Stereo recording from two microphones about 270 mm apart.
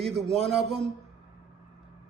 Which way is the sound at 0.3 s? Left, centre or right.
Centre.